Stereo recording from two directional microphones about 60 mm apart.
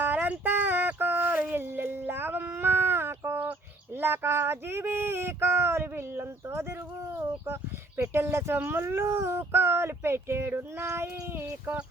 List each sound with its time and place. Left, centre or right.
0.0 s music: right
4.0 s a sound: right
8.1 s speech: right